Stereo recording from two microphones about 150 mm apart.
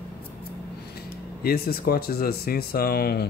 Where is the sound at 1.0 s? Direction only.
90° left.